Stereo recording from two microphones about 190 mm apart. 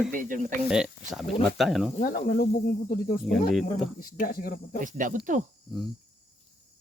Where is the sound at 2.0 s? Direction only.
50° left (ahead or behind).